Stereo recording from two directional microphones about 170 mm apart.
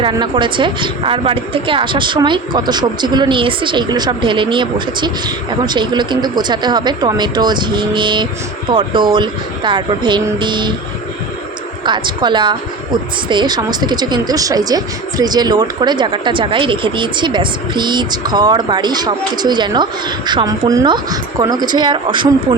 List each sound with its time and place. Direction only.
0.0 s speech: 30° right (ahead or behind)
11.8 s speech: 25° right (ahead or behind)